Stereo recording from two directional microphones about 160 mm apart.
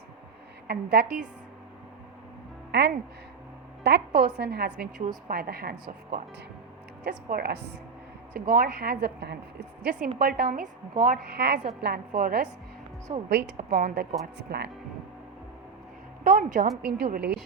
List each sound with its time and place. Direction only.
0.7 s a woman's voice: 85° right
2.7 s a woman's voice: 90° right
4.9 s a woman's voice: 65° right (ahead or behind); by 7.6 s 80° right
8.3 s a woman's voice: 65° right (ahead or behind); by 9.4 s 90° right
10.2 s a woman's voice: 65° right (ahead or behind); by 11.6 s 90° right
11.8 s a woman's voice: 75° right (ahead or behind)
14.3 s speech: 90° right
16.2 s a woman's voice: 55° right (ahead or behind); by 17.4 s 90° right